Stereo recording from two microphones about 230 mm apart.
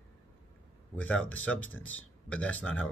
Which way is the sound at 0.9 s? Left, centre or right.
Centre.